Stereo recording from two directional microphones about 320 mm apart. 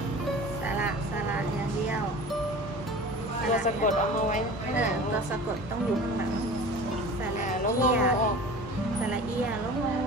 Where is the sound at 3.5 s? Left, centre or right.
Left.